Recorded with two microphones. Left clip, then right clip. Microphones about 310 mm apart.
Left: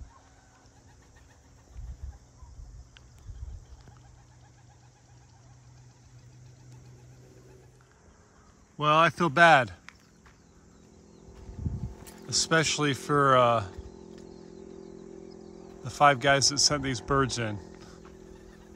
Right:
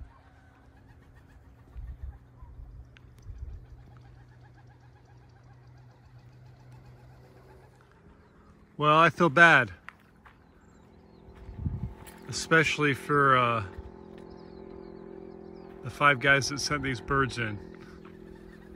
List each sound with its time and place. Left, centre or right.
8.7 s walk: centre
12.3 s speech: centre
17.7 s a sound: centre